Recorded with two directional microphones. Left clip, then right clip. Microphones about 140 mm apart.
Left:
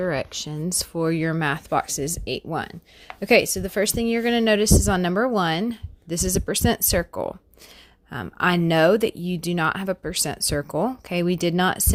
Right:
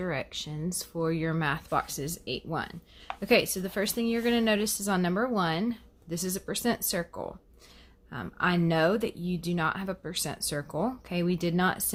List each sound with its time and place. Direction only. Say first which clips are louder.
0.0 s a woman's voice: left 8 dB; 50° left (ahead or behind)